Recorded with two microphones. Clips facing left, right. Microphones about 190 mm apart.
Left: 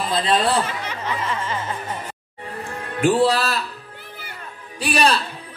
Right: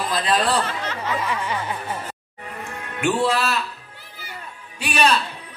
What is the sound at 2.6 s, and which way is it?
Speech, 35° left (ahead or behind).